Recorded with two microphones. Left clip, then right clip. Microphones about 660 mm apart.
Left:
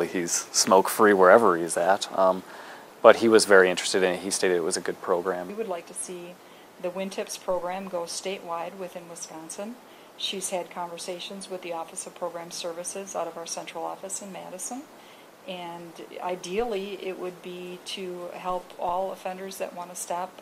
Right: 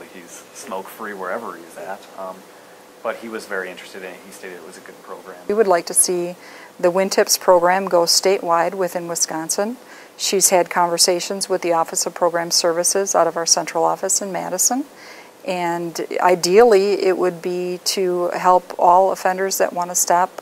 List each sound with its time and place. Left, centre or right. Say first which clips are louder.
0.7 s speech: left 10 dB; left
5.6 s speech: right 16 dB; right